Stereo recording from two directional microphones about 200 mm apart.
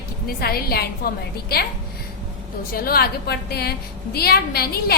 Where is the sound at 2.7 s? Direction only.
45° left (ahead or behind).